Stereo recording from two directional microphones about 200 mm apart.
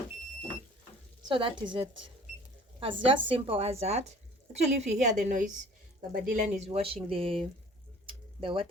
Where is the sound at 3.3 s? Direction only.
25° right (ahead or behind).